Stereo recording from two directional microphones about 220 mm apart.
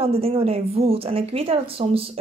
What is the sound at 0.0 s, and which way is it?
Speech, 25° right (ahead or behind).